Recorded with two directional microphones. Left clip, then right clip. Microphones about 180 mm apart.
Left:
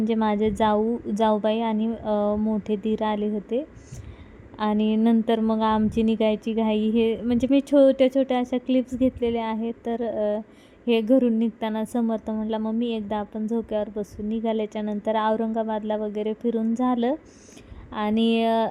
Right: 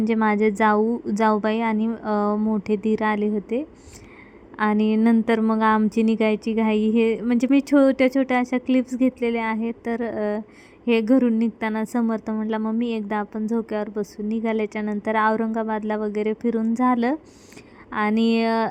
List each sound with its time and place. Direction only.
0.0 s a woman's voice: 15° right (ahead or behind)